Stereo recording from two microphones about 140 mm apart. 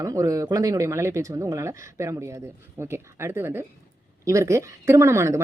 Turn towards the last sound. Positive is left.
turn(degrees=-20)  # may be behind; listen again after turning